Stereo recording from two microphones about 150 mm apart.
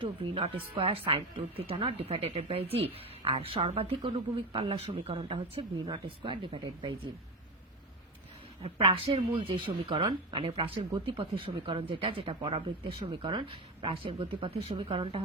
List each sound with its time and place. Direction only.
0.0 s speech: 35° right (ahead or behind)
8.6 s speech: 40° right (ahead or behind)